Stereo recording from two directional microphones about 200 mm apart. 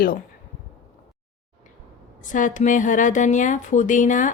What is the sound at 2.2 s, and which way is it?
A woman's voice, 40° left (ahead or behind).